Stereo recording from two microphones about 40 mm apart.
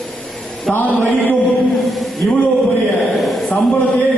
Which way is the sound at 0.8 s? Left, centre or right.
Left.